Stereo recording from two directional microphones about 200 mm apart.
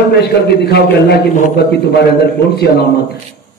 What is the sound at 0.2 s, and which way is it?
A man's voice, 55° left (ahead or behind).